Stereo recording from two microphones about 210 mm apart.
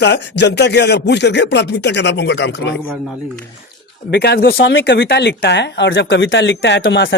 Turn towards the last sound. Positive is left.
turn(degrees=60)  # may be behind; listen again after turning